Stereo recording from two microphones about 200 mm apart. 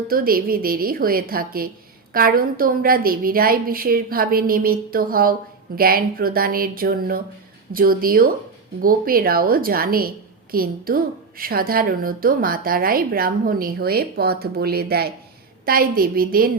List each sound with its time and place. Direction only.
0.1 s a woman's voice: 45° right (ahead or behind)